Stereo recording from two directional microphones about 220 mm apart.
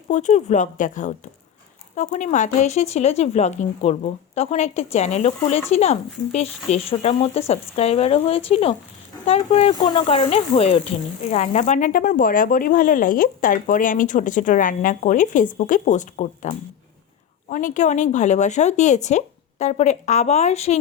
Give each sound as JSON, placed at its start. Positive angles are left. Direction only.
{"t": 0.1, "sound": "speech", "side_deg": 35}